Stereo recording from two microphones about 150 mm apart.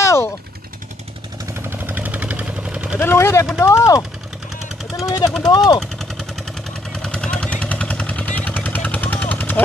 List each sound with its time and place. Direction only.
0.0 s vehicle: 20° left (ahead or behind)
1.4 s vehicle: 15° right (ahead or behind)
3.0 s speech: 15° left (ahead or behind)
5.8 s vehicle: centre (ahead or behind)